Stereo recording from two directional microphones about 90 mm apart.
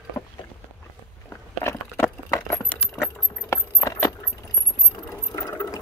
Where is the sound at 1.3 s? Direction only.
30° left (ahead or behind).